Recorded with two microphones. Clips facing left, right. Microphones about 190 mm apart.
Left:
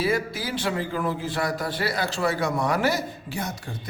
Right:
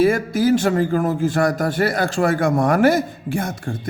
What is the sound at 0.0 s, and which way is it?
A man's voice, 50° right (ahead or behind).